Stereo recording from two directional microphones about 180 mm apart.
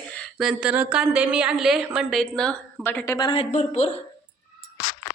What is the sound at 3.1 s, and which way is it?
Speech, 25° left (ahead or behind).